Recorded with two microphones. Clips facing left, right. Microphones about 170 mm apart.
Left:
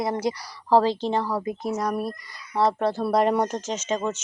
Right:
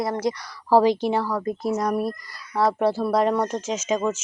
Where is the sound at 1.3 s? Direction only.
10° left (ahead or behind).